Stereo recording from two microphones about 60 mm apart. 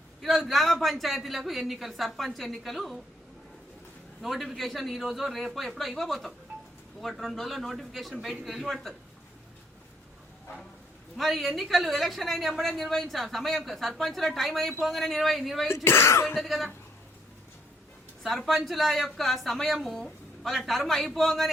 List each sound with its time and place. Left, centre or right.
0.2 s a woman's voice: centre
4.2 s a woman's voice: centre
11.2 s a woman's voice: centre
15.7 s speech: left
16.3 s a woman's voice: centre
18.2 s a woman's voice: centre